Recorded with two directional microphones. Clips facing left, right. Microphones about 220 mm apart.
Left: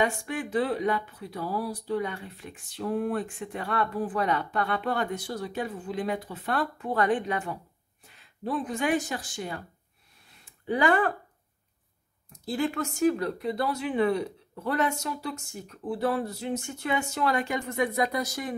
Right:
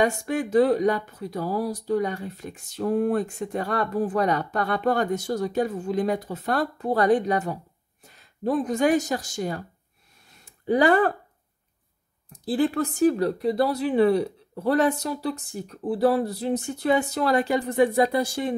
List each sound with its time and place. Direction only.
0.0 s speech: 40° right (ahead or behind)
10.3 s a sound: 40° right (ahead or behind)
12.3 s speech: 35° right (ahead or behind)